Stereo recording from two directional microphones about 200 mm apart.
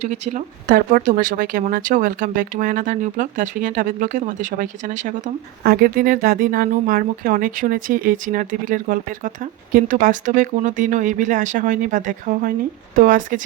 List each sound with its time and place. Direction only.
0.0 s speech: 35° right (ahead or behind)